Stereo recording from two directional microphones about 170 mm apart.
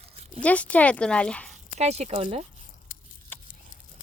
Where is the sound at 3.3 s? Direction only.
10° left (ahead or behind).